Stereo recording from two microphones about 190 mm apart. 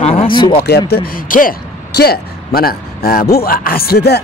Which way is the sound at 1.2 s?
45° left (ahead or behind).